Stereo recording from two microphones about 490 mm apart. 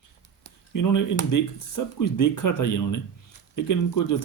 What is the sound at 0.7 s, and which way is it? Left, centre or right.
Speech, left.